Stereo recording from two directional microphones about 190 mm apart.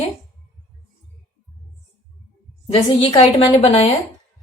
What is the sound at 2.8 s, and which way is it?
A woman's voice, 25° left (ahead or behind).